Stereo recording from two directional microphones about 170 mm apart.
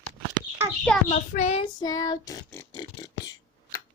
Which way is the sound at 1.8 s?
20° left (ahead or behind).